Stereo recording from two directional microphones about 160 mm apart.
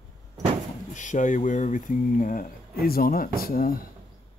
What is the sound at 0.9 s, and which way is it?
Speech, 50° left (ahead or behind).